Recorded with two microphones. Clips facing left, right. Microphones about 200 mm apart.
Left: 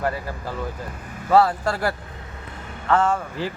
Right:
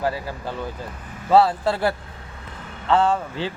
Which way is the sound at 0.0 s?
Centre (ahead or behind).